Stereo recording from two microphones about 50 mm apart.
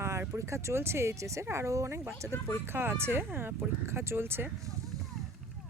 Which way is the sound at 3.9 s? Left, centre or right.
Right.